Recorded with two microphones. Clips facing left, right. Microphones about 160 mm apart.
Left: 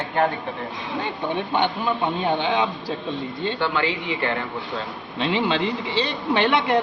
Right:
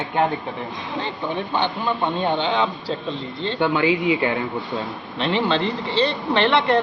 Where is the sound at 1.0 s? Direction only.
15° left (ahead or behind).